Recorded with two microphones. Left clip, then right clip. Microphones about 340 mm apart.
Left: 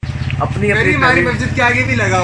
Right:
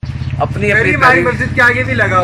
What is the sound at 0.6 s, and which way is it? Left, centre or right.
Speech, right.